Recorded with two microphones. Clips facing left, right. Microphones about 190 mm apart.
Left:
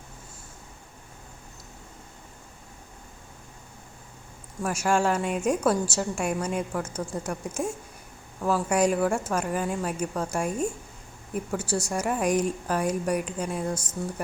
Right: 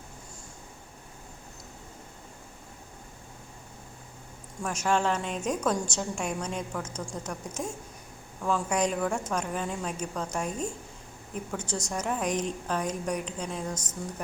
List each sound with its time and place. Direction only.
4.6 s a woman's voice: 10° left (ahead or behind)